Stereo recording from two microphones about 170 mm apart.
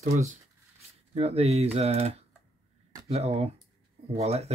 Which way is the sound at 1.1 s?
35° right (ahead or behind).